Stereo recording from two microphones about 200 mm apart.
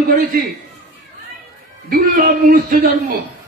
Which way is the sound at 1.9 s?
45° right (ahead or behind).